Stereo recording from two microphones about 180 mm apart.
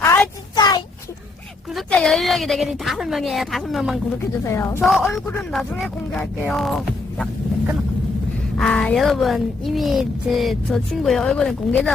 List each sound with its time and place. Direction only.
0.0 s a sound: 15° left (ahead or behind)
1.7 s child singing: centre (ahead or behind)
4.4 s speech: 15° left (ahead or behind)
4.8 s child singing: centre (ahead or behind)
8.5 s child singing: 5° left (ahead or behind)